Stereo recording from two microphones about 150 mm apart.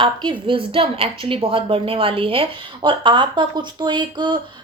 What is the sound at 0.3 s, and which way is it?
A woman's voice, 35° right (ahead or behind).